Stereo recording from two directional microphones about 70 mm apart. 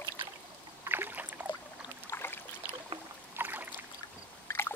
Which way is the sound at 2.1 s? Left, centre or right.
Left.